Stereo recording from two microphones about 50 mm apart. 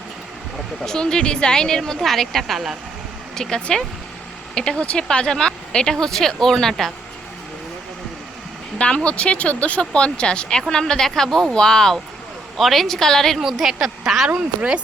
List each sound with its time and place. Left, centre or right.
0.9 s speech: centre
3.3 s speech: centre
9.0 s a woman's voice: left; by 13.4 s centre
13.4 s a woman's voice: centre
14.3 s speech: centre